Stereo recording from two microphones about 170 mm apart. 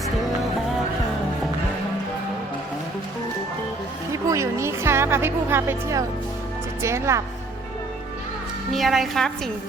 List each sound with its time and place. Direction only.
4.1 s music: 15° right (ahead or behind)
6.8 s a woman's voice: 15° right (ahead or behind)
8.7 s a woman's voice: centre (ahead or behind)